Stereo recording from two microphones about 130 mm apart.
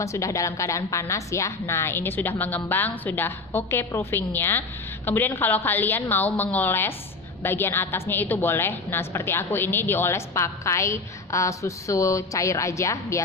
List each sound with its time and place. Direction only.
0.0 s a woman's voice: 25° left (ahead or behind)